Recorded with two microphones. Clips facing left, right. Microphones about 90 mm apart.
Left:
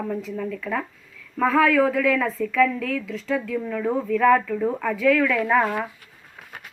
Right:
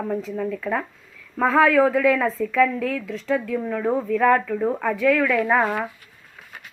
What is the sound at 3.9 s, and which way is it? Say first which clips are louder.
A woman's voice: left 1 dB; 10° right (ahead or behind).